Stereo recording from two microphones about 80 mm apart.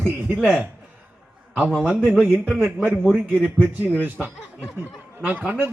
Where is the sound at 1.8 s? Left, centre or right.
Centre.